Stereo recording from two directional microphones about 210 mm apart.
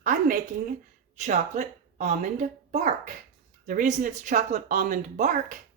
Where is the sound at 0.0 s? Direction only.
35° right (ahead or behind).